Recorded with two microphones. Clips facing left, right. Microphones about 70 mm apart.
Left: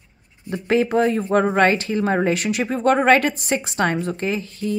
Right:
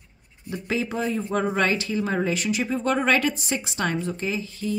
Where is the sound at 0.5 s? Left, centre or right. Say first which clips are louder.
Left 8 dB; left.